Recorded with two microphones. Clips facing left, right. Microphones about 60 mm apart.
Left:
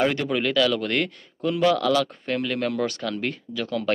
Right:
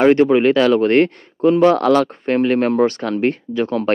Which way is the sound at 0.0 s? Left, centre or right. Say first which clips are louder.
Right 11 dB; right.